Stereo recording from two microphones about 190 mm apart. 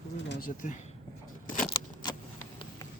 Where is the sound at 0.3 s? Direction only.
50° left (ahead or behind).